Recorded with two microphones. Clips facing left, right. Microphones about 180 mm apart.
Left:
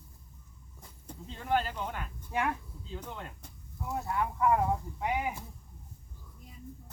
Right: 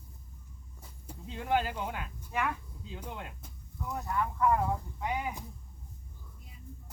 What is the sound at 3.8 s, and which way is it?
A man's voice, 20° left (ahead or behind).